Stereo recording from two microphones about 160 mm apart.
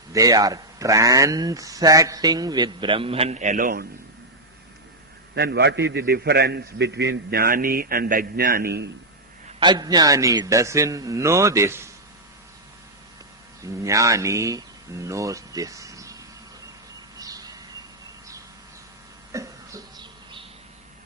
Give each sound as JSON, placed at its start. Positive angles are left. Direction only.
{"t": 0.1, "sound": "speech", "side_deg": -20}
{"t": 5.3, "sound": "a man's voice", "side_deg": -90}
{"t": 9.6, "sound": "speech", "side_deg": -25}
{"t": 13.6, "sound": "speech", "side_deg": -20}
{"t": 17.2, "sound": "a sound", "side_deg": -20}
{"t": 19.3, "sound": "cough", "side_deg": -20}